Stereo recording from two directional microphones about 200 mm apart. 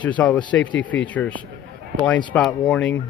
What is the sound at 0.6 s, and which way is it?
Speech, 70° left (ahead or behind).